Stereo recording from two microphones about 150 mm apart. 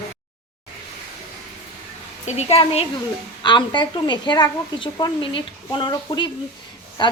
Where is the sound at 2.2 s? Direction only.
40° left (ahead or behind).